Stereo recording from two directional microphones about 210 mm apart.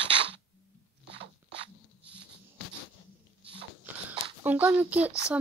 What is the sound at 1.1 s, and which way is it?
Crunch, 25° right (ahead or behind).